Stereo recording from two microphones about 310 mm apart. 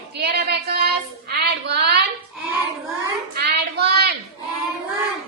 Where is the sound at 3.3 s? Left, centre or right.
Right.